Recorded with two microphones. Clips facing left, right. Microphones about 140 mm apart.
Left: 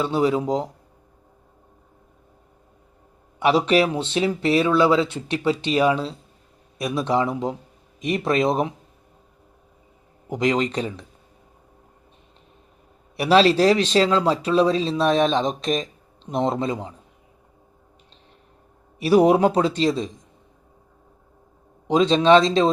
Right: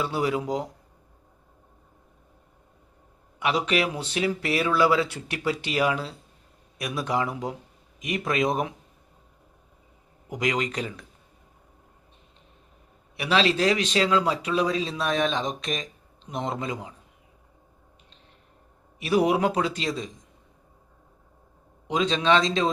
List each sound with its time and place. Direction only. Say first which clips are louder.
0.0 s speech: left 5 dB; 25° left (ahead or behind)
3.4 s speech: left 7 dB; 30° left (ahead or behind)
10.2 s speech: left 6 dB; 30° left (ahead or behind)
13.1 s speech: left 7 dB; 40° left (ahead or behind)
18.9 s speech: left 6 dB; 35° left (ahead or behind)
21.8 s speech: left 7 dB; 35° left (ahead or behind)